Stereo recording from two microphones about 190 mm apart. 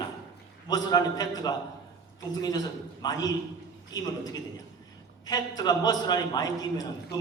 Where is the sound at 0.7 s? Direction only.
20° left (ahead or behind).